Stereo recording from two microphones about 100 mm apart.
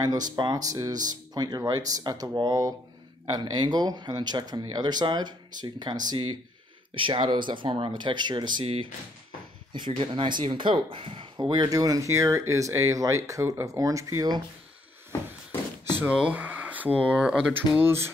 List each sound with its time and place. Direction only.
0.0 s speech: 40° right (ahead or behind)
6.9 s speech: 60° right (ahead or behind)
9.7 s speech: 50° right (ahead or behind)
11.3 s speech: 45° right (ahead or behind)
16.0 s speech: 10° right (ahead or behind)